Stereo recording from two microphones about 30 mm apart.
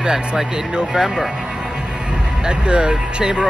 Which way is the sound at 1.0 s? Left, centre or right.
Right.